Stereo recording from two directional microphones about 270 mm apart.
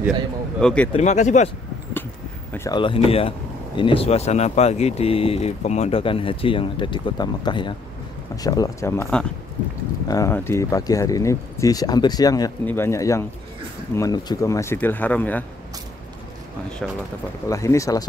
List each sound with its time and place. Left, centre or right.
0.6 s speech: centre
0.9 s speech: left
2.5 s speech: centre
16.8 s speech: centre